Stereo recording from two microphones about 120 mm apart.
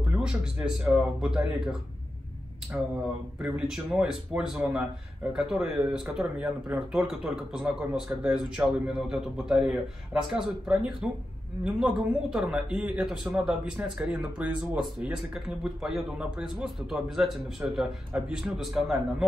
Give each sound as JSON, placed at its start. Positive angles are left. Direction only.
{"t": 0.1, "sound": "speech", "side_deg": -5}